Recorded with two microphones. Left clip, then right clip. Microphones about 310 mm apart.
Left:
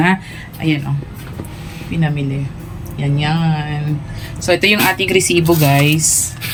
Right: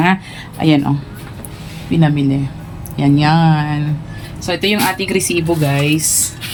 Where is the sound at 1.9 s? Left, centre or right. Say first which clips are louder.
Right 6 dB; centre.